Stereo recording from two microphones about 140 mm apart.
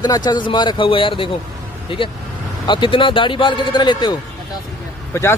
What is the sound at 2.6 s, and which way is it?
Speech, 35° left (ahead or behind).